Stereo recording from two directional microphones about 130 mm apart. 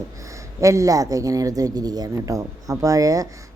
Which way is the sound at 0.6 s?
25° right (ahead or behind).